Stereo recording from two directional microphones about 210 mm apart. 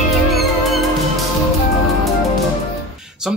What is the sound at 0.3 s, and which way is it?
Music, centre (ahead or behind).